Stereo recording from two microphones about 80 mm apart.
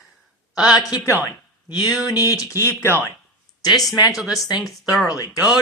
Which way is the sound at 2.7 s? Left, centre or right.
Left.